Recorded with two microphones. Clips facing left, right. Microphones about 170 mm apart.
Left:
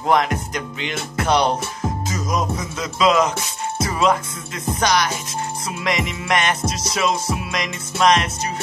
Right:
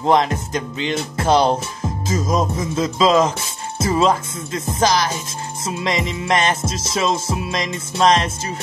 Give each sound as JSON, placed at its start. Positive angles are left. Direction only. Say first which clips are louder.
{"t": 0.0, "sound": "music", "louder": "right 2 dB", "side_deg": -30}
{"t": 2.0, "sound": "speech", "louder": "right 6 dB", "side_deg": -25}
{"t": 4.6, "sound": "music", "louder": "right 1 dB", "side_deg": -25}